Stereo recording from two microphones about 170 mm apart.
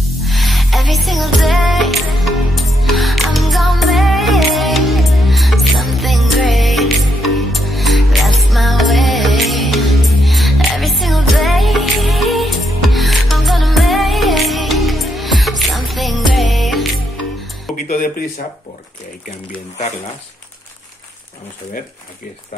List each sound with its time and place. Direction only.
0.2 s music: centre (ahead or behind)
17.7 s music: 55° left (ahead or behind)